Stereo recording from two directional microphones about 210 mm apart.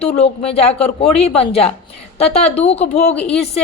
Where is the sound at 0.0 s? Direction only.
30° left (ahead or behind).